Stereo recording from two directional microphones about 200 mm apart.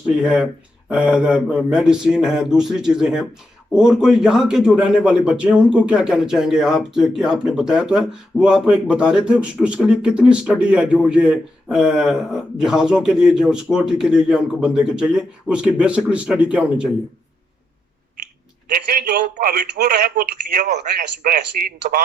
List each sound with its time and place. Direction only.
0.2 s a man's voice: 5° right (ahead or behind)
18.7 s a man's voice: 50° right (ahead or behind)